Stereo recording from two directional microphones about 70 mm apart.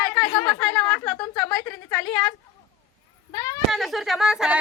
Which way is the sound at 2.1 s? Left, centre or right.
Left.